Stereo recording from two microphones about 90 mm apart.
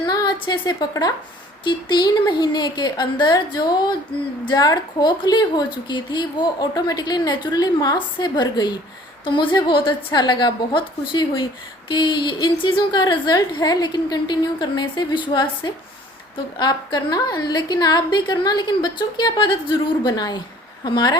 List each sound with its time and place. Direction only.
0.0 s a sound: 50° left (ahead or behind)
0.3 s a woman's voice: 60° left (ahead or behind)
9.2 s a woman's voice: 65° left (ahead or behind)
20.1 s a woman's voice: 50° left (ahead or behind)